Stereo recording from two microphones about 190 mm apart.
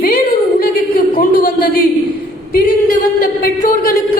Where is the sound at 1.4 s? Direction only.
55° left (ahead or behind).